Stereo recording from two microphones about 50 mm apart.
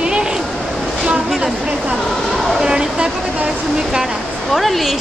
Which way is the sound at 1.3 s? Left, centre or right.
Centre.